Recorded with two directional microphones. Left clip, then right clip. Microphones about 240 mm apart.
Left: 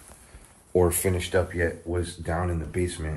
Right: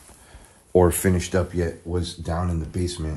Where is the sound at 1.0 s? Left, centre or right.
Right.